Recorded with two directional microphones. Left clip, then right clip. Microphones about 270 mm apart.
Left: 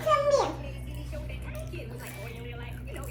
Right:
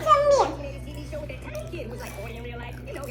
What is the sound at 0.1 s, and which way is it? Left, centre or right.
Music, centre.